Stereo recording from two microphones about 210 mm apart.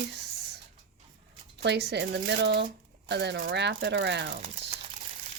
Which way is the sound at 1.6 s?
55° right (ahead or behind).